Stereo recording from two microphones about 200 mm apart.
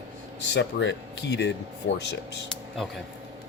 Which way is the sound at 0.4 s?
60° left (ahead or behind).